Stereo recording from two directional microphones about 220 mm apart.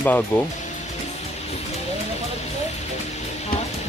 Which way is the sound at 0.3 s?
10° left (ahead or behind).